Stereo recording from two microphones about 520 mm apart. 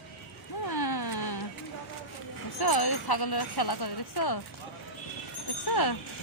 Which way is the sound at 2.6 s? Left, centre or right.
Left.